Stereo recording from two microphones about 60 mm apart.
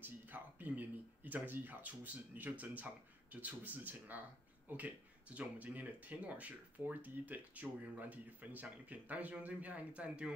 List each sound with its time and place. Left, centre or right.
0.0 s speech: right